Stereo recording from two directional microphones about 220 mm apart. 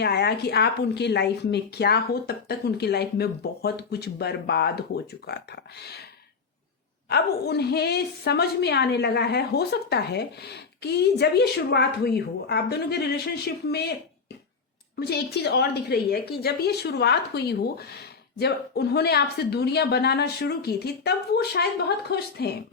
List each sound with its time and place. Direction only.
0.0 s a woman's voice: 50° left (ahead or behind)
7.1 s a woman's voice: 45° left (ahead or behind)
14.9 s a woman's voice: 45° left (ahead or behind)